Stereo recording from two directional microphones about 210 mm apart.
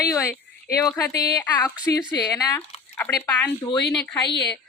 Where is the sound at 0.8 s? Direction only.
15° left (ahead or behind).